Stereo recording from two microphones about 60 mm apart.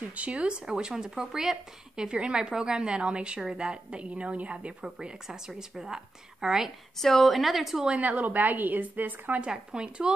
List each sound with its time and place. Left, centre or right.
0.0 s speech: right; by 6.7 s centre
7.0 s a woman's voice: centre
8.2 s a woman's voice: right
9.5 s speech: centre